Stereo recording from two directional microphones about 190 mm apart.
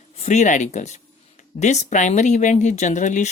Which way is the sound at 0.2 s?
40° left (ahead or behind).